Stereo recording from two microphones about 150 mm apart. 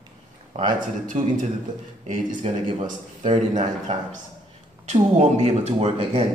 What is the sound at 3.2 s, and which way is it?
Speech, 35° right (ahead or behind).